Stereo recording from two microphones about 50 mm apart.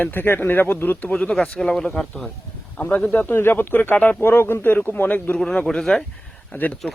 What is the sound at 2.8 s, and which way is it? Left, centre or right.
Speech, left.